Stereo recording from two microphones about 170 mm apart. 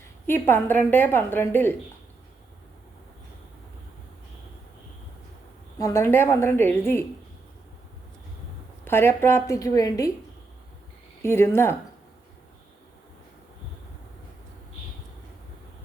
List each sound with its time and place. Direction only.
0.3 s a woman's voice: 10° left (ahead or behind)
5.8 s a woman's voice: 15° left (ahead or behind)
8.8 s a woman's voice: 15° left (ahead or behind)
11.2 s a woman's voice: 15° left (ahead or behind)